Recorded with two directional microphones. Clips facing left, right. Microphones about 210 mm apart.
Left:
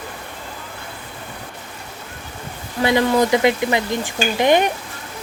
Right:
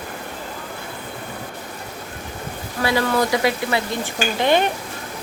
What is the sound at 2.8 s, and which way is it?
Speech, 20° left (ahead or behind).